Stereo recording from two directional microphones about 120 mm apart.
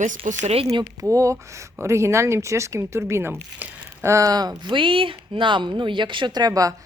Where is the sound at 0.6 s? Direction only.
50° right (ahead or behind).